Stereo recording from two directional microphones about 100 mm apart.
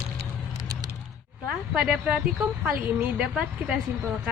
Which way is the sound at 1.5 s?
10° right (ahead or behind).